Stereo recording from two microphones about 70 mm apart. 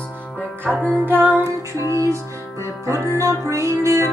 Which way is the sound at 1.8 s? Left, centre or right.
Right.